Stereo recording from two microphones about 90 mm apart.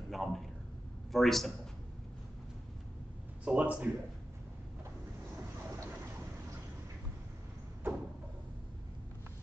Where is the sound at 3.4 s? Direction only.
15° right (ahead or behind).